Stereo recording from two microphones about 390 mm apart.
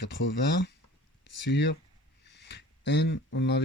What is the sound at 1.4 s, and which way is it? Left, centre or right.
A man's voice, left.